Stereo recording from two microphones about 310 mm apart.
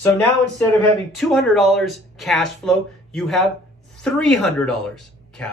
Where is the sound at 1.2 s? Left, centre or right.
Centre.